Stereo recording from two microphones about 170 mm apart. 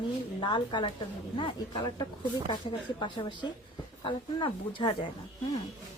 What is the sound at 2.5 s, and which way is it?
A woman's voice, 30° left (ahead or behind).